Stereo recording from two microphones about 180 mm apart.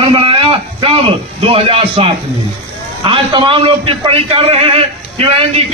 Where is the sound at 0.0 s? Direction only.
30° right (ahead or behind).